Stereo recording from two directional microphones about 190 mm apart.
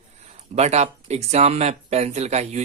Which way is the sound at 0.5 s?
35° right (ahead or behind).